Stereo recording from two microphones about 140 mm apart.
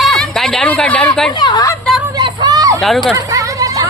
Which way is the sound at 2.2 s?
30° right (ahead or behind).